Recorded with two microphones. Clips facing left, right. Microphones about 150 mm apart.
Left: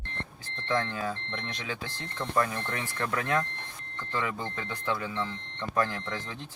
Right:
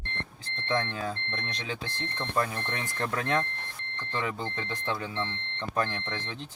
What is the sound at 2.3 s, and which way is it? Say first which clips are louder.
Speech: left 2 dB; 20° right (ahead or behind).